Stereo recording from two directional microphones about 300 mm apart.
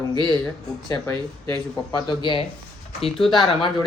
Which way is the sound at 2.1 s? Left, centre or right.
Centre.